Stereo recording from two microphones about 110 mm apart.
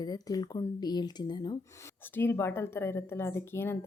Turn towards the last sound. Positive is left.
turn(degrees=20)  # may be behind; listen again after turning